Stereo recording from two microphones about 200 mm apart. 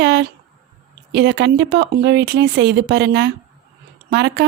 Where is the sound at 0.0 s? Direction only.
60° right (ahead or behind).